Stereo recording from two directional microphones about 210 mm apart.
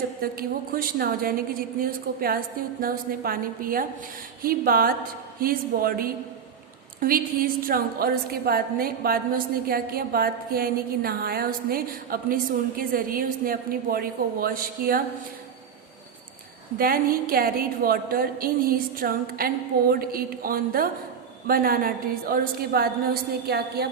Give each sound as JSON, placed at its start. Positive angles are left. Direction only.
{"t": 0.2, "sound": "a woman's voice", "side_deg": -45}
{"t": 16.7, "sound": "a woman's voice", "side_deg": -45}